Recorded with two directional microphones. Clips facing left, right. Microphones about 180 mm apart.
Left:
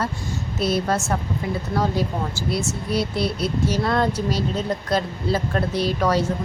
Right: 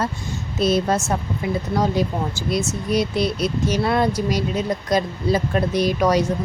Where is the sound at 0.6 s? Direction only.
20° right (ahead or behind).